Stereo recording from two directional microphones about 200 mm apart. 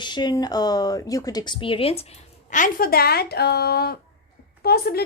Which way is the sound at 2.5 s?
40° left (ahead or behind).